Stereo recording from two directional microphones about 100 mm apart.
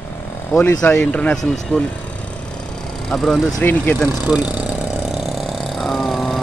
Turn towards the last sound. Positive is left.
turn(degrees=0)  # may be behind; listen again after turning